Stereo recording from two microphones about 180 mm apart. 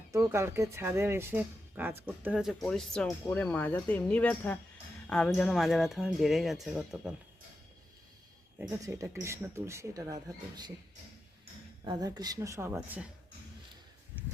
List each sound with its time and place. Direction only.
0.1 s speech: 15° right (ahead or behind)
8.5 s speech: 15° right (ahead or behind)
11.9 s speech: 20° right (ahead or behind)